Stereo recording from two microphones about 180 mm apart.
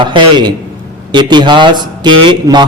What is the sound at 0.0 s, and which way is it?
A man's voice, 25° right (ahead or behind).